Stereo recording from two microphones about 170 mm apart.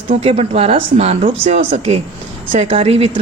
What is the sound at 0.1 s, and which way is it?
A woman's voice, 35° right (ahead or behind).